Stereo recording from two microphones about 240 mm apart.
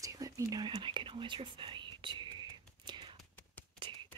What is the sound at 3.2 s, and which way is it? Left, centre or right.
Whispering, centre.